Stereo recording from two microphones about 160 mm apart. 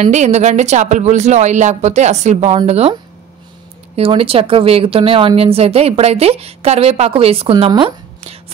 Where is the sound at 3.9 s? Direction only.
35° right (ahead or behind).